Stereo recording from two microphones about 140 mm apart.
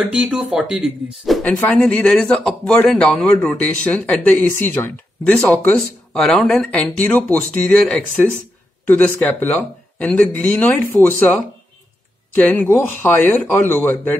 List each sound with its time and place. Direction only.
0.0 s a man's voice: 10° right (ahead or behind); by 11.3 s 15° left (ahead or behind)
12.4 s a man's voice: 10° left (ahead or behind)